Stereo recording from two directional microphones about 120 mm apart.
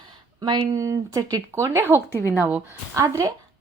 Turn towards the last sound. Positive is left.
turn(degrees=-25)  # may be behind; listen again after turning